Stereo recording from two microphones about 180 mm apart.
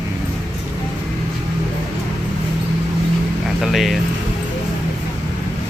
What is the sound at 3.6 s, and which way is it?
Speech, centre (ahead or behind).